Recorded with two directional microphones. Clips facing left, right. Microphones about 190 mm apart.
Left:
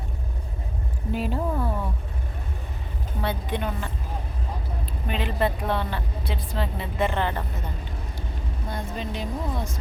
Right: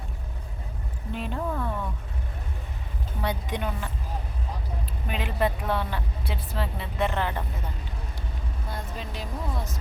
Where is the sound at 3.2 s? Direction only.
15° right (ahead or behind).